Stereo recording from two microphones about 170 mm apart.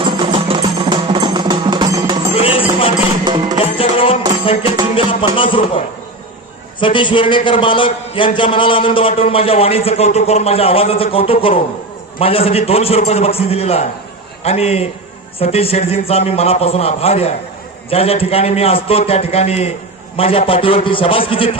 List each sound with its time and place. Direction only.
0.0 s music: 30° right (ahead or behind)
2.3 s music: 35° left (ahead or behind)
3.2 s music: 25° right (ahead or behind)
3.6 s music: 35° left (ahead or behind)
4.9 s a man's voice: 30° left (ahead or behind)